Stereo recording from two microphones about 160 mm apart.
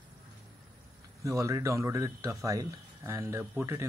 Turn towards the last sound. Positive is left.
turn(degrees=-15)  # may be behind; listen again after turning